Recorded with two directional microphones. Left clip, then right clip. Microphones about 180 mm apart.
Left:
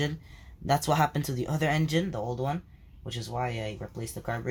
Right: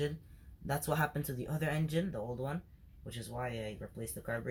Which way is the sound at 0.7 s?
45° left (ahead or behind).